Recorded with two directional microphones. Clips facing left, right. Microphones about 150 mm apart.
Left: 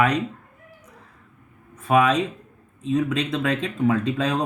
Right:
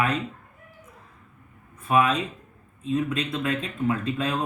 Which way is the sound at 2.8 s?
75° left (ahead or behind).